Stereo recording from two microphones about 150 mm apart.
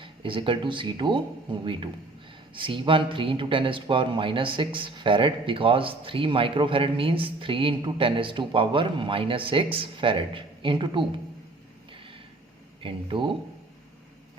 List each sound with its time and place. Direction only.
0.0 s speech: 35° right (ahead or behind)
12.8 s speech: 35° right (ahead or behind)